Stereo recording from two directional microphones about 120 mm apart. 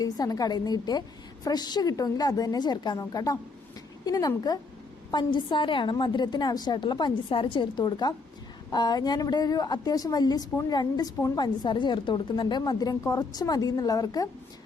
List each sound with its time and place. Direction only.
0.0 s a woman's voice: 30° left (ahead or behind)